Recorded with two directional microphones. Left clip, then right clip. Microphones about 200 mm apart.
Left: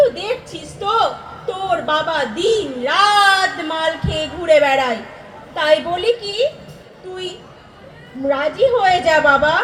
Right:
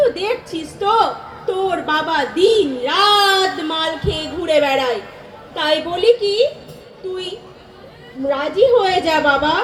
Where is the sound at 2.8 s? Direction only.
40° right (ahead or behind).